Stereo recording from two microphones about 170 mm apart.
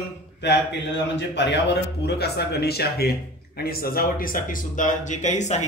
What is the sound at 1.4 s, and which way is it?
Speech, 85° left.